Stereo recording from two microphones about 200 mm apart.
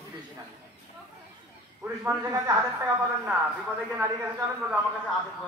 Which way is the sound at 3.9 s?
10° right (ahead or behind).